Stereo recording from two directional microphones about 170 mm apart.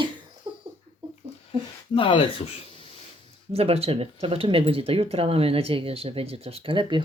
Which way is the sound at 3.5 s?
35° right (ahead or behind).